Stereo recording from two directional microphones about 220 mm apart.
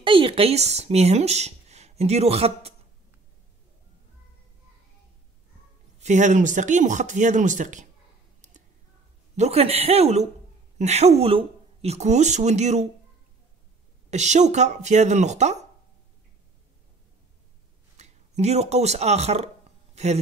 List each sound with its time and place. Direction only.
0.0 s speech: 25° right (ahead or behind)
5.9 s speech: 35° right (ahead or behind)
9.4 s speech: 30° right (ahead or behind)
14.1 s speech: 30° right (ahead or behind)
17.9 s speech: 30° right (ahead or behind)